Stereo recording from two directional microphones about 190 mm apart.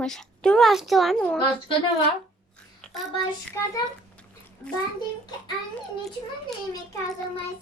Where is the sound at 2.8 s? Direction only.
Centre (ahead or behind).